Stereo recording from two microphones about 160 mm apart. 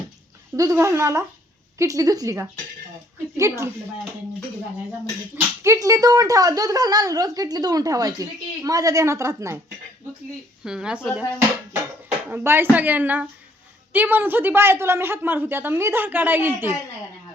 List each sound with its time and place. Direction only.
0.5 s a woman's voice: 20° right (ahead or behind)
5.6 s a woman's voice: 20° right (ahead or behind)
10.6 s speech: 5° right (ahead or behind)
12.3 s a woman's voice: 15° right (ahead or behind)